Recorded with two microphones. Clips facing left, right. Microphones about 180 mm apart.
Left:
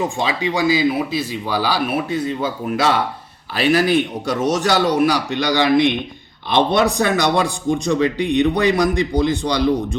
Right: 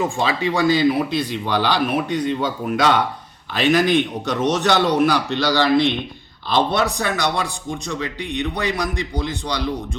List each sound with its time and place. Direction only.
0.2 s a man's voice: 15° left (ahead or behind)